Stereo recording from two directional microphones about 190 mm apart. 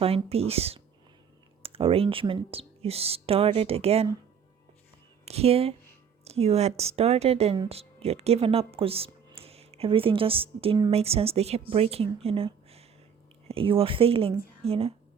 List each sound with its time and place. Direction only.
0.0 s speech: 30° right (ahead or behind)
5.2 s speech: 30° right (ahead or behind)